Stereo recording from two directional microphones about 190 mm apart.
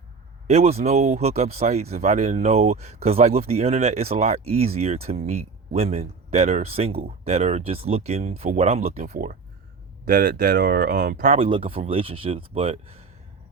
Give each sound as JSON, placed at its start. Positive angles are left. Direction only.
{"t": 0.4, "sound": "speech", "side_deg": -35}
{"t": 9.0, "sound": "speech", "side_deg": -45}